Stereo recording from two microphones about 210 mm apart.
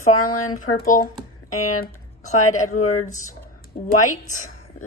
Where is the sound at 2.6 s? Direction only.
90° left.